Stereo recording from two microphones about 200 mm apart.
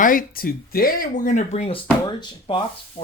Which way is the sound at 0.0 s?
45° left (ahead or behind).